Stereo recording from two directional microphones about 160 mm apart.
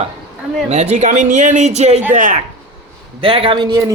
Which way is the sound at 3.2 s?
35° right (ahead or behind).